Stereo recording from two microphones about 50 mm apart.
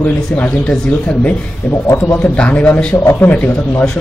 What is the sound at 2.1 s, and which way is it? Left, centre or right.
A man's voice, left.